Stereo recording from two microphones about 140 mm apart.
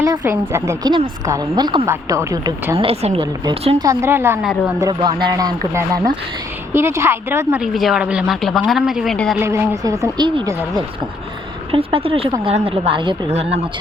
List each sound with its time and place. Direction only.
0.2 s a woman's voice: 20° right (ahead or behind)
2.7 s a woman's voice: 45° right (ahead or behind)
3.8 s a woman's voice: 20° right (ahead or behind)
4.9 s speech: 35° right (ahead or behind)
6.7 s a woman's voice: 15° right (ahead or behind)
7.6 s a woman's voice: centre (ahead or behind)
9.4 s a woman's voice: 20° right (ahead or behind)
11.7 s a woman's voice: 40° right (ahead or behind)